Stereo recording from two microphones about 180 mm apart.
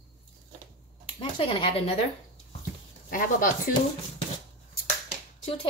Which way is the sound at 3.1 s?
50° left (ahead or behind).